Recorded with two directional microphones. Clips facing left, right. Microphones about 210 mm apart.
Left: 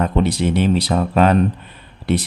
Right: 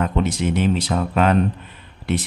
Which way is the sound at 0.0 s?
35° left (ahead or behind).